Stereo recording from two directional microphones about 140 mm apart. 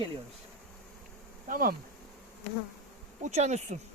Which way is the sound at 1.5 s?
80° right.